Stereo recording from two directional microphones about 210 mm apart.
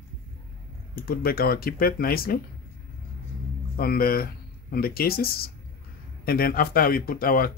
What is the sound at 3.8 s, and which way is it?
Speech, 45° left (ahead or behind).